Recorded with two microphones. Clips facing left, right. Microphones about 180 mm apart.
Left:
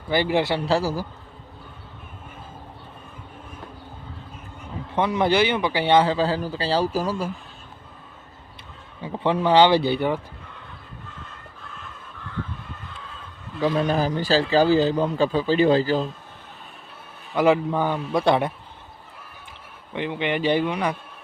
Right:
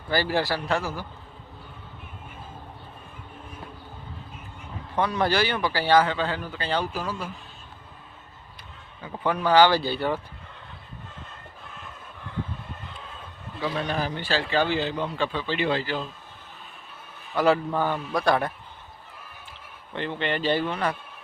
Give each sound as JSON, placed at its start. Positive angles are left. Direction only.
{"t": 0.1, "sound": "speech", "side_deg": 20}
{"t": 0.6, "sound": "a man's voice", "side_deg": 35}
{"t": 4.9, "sound": "a man's voice", "side_deg": 20}
{"t": 9.0, "sound": "speech", "side_deg": 25}
{"t": 13.6, "sound": "a man's voice", "side_deg": 40}
{"t": 17.3, "sound": "speech", "side_deg": 15}
{"t": 19.9, "sound": "speech", "side_deg": 10}